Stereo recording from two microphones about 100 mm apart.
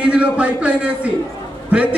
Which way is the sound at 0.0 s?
10° right (ahead or behind).